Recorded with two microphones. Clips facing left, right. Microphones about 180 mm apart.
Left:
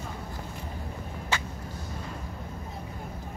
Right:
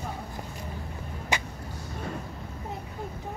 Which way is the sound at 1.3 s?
15° right (ahead or behind).